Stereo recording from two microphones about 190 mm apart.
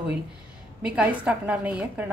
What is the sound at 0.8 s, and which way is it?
A woman's voice, 5° right (ahead or behind).